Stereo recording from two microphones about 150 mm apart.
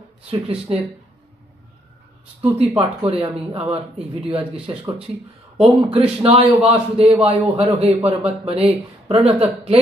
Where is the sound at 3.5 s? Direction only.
40° right (ahead or behind).